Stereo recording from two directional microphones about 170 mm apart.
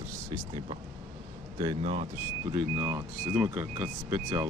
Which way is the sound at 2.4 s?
20° right (ahead or behind).